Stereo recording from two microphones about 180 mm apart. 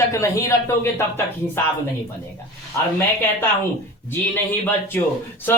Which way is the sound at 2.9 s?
10° left (ahead or behind).